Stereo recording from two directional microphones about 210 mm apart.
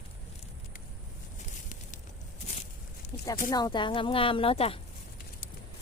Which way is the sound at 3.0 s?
30° left (ahead or behind).